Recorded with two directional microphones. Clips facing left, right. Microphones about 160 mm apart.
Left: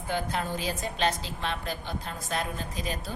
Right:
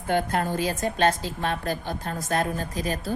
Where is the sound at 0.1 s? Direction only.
55° right (ahead or behind).